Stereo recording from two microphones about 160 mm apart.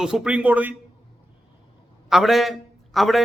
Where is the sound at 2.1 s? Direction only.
Centre (ahead or behind).